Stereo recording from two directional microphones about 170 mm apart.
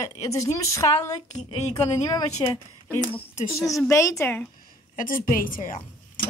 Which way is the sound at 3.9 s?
15° left (ahead or behind).